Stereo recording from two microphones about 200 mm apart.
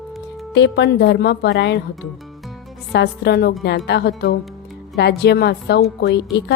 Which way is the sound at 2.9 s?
55° left (ahead or behind).